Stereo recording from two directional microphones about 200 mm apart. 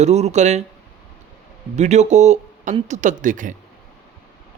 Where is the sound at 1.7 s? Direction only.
35° right (ahead or behind).